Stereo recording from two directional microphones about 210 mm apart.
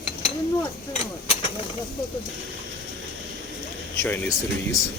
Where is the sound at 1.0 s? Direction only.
30° left (ahead or behind).